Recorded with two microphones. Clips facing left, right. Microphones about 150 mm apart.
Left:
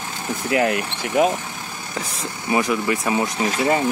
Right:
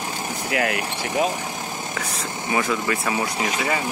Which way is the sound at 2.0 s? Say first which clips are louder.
Right 1 dB; 20° right (ahead or behind).